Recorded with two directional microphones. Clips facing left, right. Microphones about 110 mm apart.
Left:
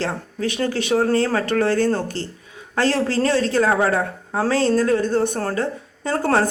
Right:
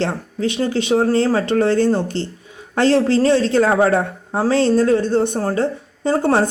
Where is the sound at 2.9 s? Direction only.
25° right (ahead or behind).